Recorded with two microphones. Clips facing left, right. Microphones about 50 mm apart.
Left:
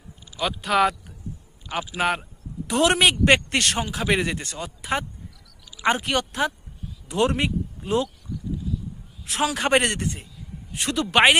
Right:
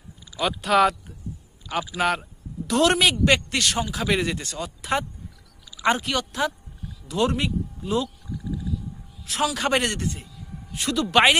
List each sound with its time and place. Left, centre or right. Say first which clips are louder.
0.3 s speech: right 2 dB; centre; by 4.0 s left
4.0 s speech: left 2 dB; left
4.8 s speech: right 1 dB; centre
5.8 s speech: even; left
9.2 s speech: even; left